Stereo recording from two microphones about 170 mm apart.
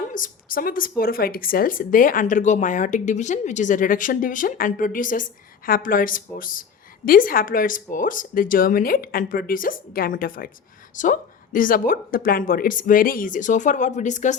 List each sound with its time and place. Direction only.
0.1 s a woman's voice: 55° left (ahead or behind)